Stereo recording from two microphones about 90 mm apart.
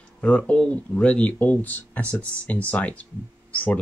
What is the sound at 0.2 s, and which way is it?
Speech, 15° left (ahead or behind).